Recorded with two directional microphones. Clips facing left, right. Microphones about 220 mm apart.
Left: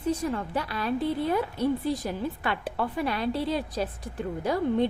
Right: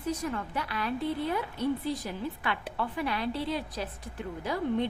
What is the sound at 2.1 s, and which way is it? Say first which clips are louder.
A woman's voice: left 4 dB; 40° left (ahead or behind).